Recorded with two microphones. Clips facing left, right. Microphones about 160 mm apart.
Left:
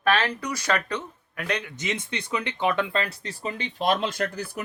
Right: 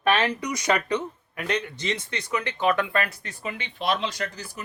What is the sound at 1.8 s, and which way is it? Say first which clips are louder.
Speech: even; 15° left (ahead or behind).